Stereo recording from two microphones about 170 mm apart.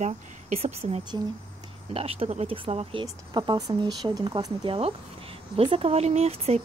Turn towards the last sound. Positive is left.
turn(degrees=-40)  # may be behind; listen again after turning